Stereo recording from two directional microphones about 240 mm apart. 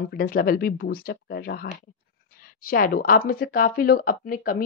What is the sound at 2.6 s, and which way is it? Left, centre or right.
A woman's voice, left.